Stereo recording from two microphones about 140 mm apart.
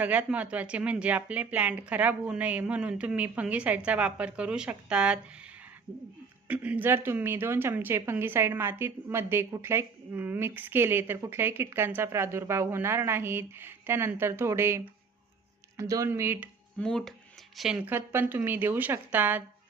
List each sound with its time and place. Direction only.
0.0 s speech: 10° right (ahead or behind)
6.5 s speech: 10° right (ahead or behind)
15.8 s speech: 20° right (ahead or behind)
16.7 s speech: 5° left (ahead or behind)
17.9 s speech: 15° right (ahead or behind)